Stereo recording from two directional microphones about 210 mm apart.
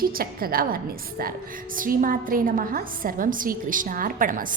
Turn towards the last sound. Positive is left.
turn(degrees=-40)  # may be behind; listen again after turning